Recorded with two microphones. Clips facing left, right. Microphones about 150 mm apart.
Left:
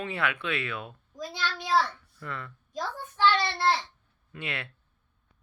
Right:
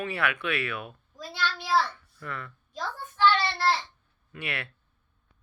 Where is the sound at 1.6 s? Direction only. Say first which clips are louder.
Left 1 dB; 20° left (ahead or behind).